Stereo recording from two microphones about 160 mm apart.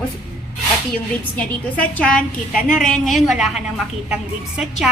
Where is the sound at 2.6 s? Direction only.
55° left (ahead or behind).